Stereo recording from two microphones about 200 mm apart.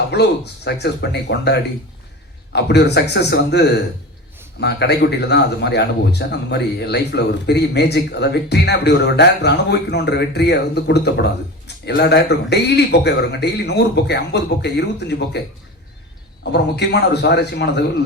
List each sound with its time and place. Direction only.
0.1 s a man's voice: 55° left (ahead or behind)
16.4 s a man's voice: 55° left (ahead or behind)